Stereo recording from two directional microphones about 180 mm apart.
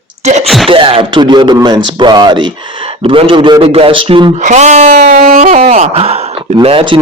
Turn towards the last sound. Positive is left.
turn(degrees=-30)  # may be behind; listen again after turning